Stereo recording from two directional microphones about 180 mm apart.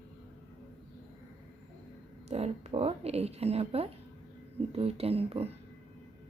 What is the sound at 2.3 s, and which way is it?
A woman's voice, 35° right (ahead or behind).